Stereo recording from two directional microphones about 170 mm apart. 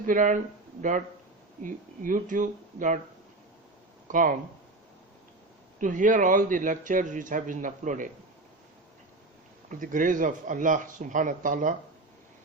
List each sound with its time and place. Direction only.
0.0 s speech: 50° right (ahead or behind)
4.1 s speech: 50° right (ahead or behind)
5.8 s speech: 50° right (ahead or behind)
9.6 s speech: 50° right (ahead or behind)